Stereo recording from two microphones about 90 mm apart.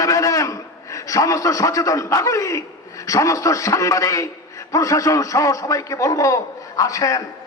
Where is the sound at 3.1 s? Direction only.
35° left (ahead or behind).